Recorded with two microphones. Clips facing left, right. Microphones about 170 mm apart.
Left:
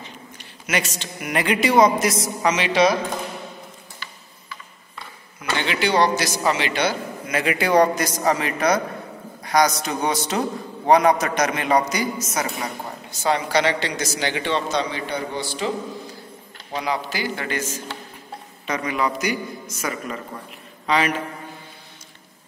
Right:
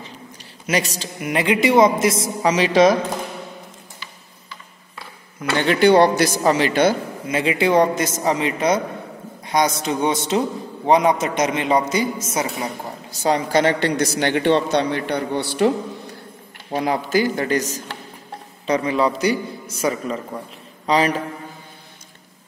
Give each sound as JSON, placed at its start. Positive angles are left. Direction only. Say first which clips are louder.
{"t": 0.4, "sound": "a woman's voice", "louder": "right 3 dB", "side_deg": -35}
{"t": 5.4, "sound": "a man's voice", "louder": "right 7 dB", "side_deg": -45}
{"t": 6.3, "sound": "a man's voice", "louder": "right 5 dB", "side_deg": -40}
{"t": 7.2, "sound": "a man's voice", "louder": "right 3 dB", "side_deg": -25}
{"t": 13.2, "sound": "a woman's voice", "louder": "right 3 dB", "side_deg": -45}
{"t": 16.7, "sound": "a man's voice", "louder": "right 6 dB", "side_deg": -45}